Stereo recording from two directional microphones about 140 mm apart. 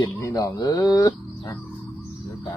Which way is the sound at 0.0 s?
25° left (ahead or behind).